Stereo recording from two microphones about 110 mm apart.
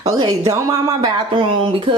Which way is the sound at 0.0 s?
30° right (ahead or behind).